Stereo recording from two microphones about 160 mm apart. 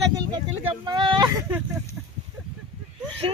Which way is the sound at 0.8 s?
30° right (ahead or behind).